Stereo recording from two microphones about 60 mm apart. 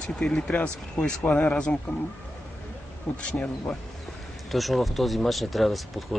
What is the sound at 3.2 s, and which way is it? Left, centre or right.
Speech, centre.